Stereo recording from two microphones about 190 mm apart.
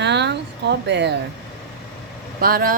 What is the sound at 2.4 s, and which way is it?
Speech, 50° right (ahead or behind).